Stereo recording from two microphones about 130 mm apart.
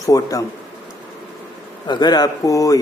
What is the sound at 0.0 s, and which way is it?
Speech, 25° left (ahead or behind).